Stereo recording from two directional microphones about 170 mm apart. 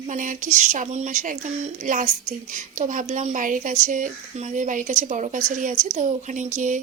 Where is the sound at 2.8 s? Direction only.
45° right (ahead or behind).